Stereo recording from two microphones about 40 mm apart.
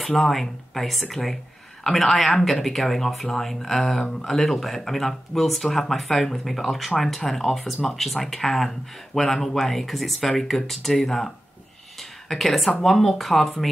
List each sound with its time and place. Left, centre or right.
0.0 s speech: centre
12.0 s a sound: centre
12.8 s speech: centre